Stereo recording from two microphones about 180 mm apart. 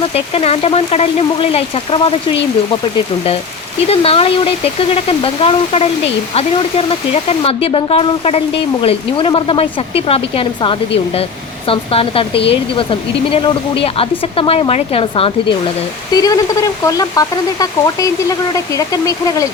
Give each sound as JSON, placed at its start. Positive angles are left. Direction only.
{"t": 0.1, "sound": "speech", "side_deg": 35}
{"t": 3.8, "sound": "speech", "side_deg": 35}
{"t": 16.1, "sound": "speech", "side_deg": 20}